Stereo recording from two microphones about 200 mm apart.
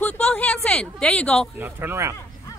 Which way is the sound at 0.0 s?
5° left (ahead or behind).